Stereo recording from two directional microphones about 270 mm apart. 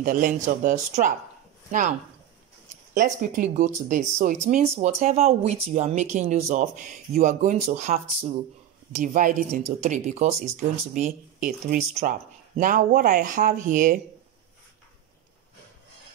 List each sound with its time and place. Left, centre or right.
0.0 s speech: right